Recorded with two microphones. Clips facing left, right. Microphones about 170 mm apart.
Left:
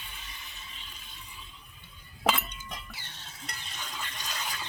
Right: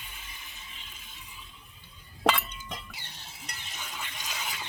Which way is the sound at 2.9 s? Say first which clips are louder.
Even; 10° right (ahead or behind).